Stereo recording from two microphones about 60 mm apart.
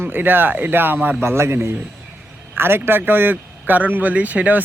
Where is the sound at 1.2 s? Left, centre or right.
Right.